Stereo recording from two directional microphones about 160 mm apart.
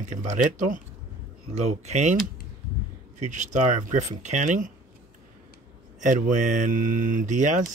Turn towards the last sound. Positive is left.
turn(degrees=-50)  # may be behind; listen again after turning